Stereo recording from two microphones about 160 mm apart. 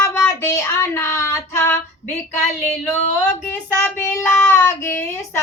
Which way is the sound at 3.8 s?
15° left (ahead or behind).